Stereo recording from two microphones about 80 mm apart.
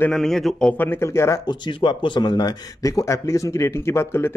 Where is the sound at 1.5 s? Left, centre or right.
Left.